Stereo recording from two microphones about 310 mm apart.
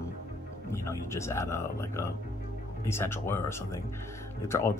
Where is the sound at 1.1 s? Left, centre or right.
Centre.